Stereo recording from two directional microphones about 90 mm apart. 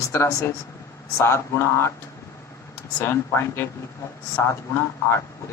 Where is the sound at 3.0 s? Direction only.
30° left (ahead or behind).